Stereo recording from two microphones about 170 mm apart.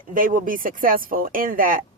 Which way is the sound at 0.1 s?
55° right (ahead or behind).